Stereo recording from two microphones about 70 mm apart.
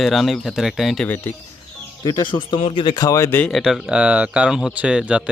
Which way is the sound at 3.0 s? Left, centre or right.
Left.